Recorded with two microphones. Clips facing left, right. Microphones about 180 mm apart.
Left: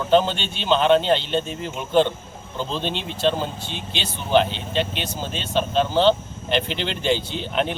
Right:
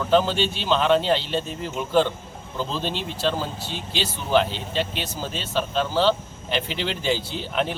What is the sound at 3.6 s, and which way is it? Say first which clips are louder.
Speech: right 2 dB; 5° right (ahead or behind).